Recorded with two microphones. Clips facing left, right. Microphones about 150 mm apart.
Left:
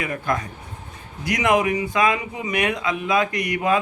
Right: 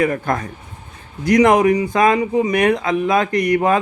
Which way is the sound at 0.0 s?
50° right (ahead or behind).